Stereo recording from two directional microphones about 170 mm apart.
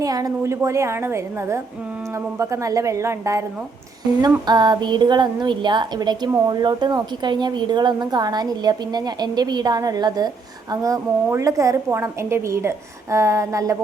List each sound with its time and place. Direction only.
0.0 s a woman's voice: 20° right (ahead or behind)
4.4 s a woman's voice: 25° right (ahead or behind)